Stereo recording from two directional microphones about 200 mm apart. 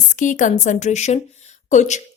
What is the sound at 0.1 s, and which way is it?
Speech, 40° left (ahead or behind).